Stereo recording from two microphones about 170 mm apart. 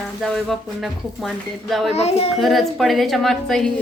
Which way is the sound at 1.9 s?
40° left (ahead or behind).